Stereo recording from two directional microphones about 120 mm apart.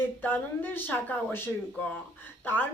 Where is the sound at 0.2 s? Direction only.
15° left (ahead or behind).